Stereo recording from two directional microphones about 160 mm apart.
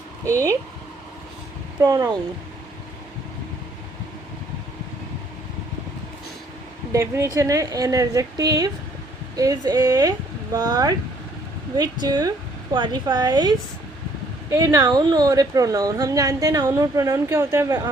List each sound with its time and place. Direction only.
0.3 s a woman's voice: 20° right (ahead or behind)
1.8 s a woman's voice: 20° right (ahead or behind)
6.9 s a woman's voice: 20° right (ahead or behind)